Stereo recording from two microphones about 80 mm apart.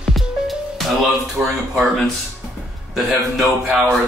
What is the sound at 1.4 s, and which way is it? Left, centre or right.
Speech, right.